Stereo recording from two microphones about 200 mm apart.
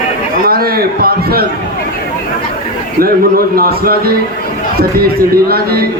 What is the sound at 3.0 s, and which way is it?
A man's voice, 50° right (ahead or behind).